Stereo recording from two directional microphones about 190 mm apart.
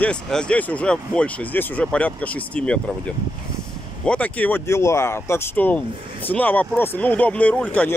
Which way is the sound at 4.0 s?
5° left (ahead or behind).